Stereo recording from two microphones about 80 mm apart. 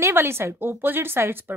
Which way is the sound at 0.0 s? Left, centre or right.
Right.